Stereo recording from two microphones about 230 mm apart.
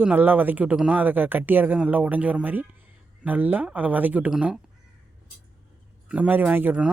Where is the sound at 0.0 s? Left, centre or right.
Centre.